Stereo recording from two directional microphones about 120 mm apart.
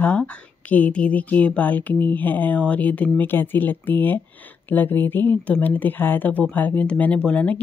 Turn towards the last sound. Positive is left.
turn(degrees=10)  # may be behind; listen again after turning